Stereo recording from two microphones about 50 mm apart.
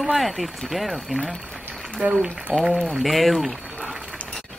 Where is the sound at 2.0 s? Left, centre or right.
Right.